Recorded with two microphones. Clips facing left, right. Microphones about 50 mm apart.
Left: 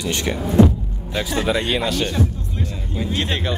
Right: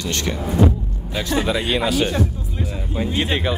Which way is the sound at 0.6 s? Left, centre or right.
Left.